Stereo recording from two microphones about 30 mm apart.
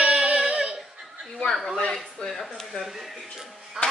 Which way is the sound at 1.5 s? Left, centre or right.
Centre.